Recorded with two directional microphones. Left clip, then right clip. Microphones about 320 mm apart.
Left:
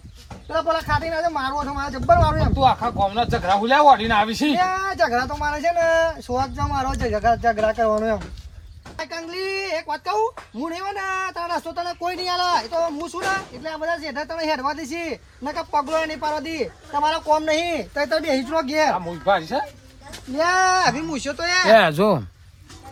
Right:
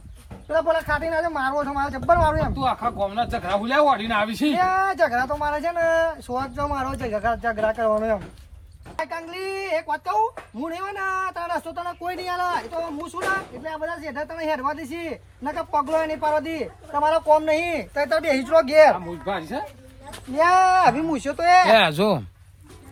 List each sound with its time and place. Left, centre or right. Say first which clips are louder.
0.4 s speech: right 1 dB; centre
2.6 s speech: left 5 dB; centre
4.7 s speech: even; centre
19.2 s speech: left 8 dB; centre
20.3 s speech: right 2 dB; right
21.7 s speech: left 2 dB; centre